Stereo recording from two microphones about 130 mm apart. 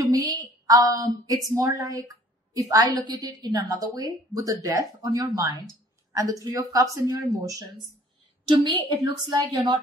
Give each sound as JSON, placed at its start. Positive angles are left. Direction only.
{"t": 0.1, "sound": "a woman's voice", "side_deg": -30}